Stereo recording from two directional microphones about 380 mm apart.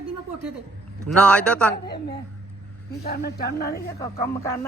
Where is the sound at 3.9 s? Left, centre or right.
Centre.